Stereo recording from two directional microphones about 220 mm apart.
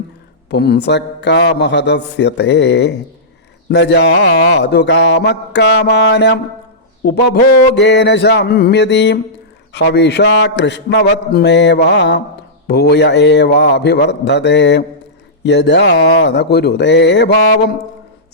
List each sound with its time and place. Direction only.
0.5 s mantra: 50° left (ahead or behind)